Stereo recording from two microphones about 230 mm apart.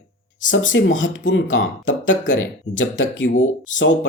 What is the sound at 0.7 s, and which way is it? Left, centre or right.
Speech, left.